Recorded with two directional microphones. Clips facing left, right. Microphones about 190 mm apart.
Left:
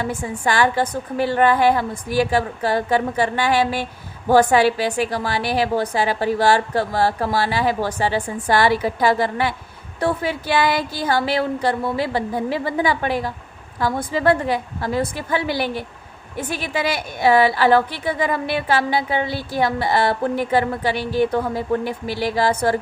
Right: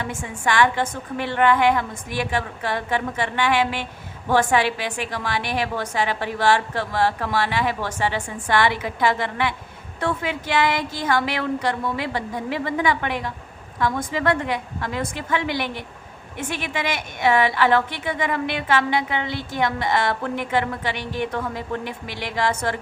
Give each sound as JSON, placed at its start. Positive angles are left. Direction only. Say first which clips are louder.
{"t": 0.0, "sound": "a woman's voice", "louder": "left 4 dB", "side_deg": 35}